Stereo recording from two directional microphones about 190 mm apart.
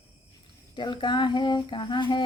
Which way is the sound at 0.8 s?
25° left (ahead or behind).